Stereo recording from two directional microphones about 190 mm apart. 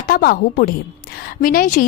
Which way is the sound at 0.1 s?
50° left (ahead or behind).